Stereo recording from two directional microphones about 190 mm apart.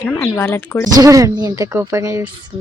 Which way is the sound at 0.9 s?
20° right (ahead or behind).